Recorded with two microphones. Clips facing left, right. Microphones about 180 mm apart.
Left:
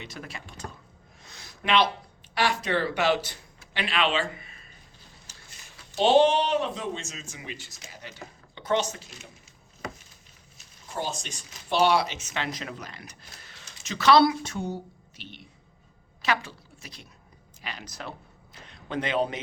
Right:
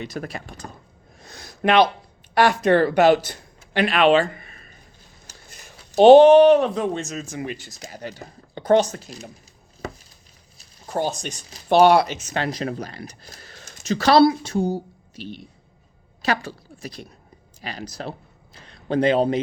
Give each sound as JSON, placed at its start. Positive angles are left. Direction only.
{"t": 0.0, "sound": "a woman's voice", "side_deg": -45}
{"t": 1.2, "sound": "a sound", "side_deg": -40}
{"t": 2.3, "sound": "a woman's voice", "side_deg": -50}
{"t": 7.6, "sound": "speech", "side_deg": -40}
{"t": 10.9, "sound": "a man's voice", "side_deg": -55}